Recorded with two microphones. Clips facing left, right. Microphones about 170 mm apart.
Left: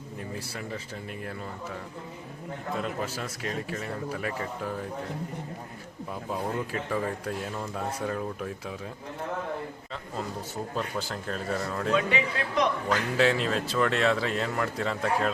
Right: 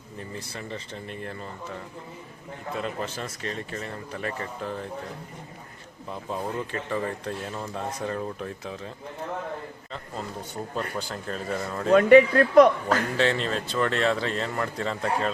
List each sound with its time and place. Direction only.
0.3 s speech: 5° left (ahead or behind)
2.8 s speech: 5° left (ahead or behind)
6.3 s speech: centre (ahead or behind)
10.9 s speech: centre (ahead or behind)
11.9 s speech: 55° right (ahead or behind)
13.1 s speech: 5° left (ahead or behind)